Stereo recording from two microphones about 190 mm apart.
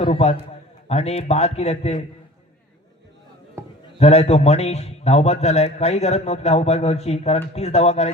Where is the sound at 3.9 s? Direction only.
35° left (ahead or behind).